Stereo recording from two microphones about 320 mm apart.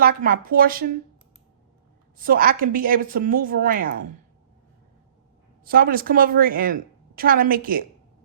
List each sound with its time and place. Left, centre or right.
0.3 s a woman's voice: right
2.1 s a woman's voice: right
5.6 s a woman's voice: right